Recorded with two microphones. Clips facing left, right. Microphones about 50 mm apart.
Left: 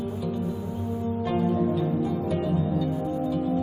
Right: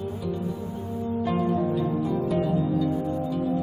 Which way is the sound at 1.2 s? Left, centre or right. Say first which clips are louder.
Left 1 dB; centre.